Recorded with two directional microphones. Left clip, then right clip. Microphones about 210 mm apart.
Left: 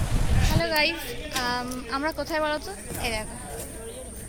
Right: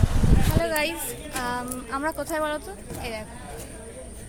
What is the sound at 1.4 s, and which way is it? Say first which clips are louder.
Speech: left 1 dB; 5° left (ahead or behind).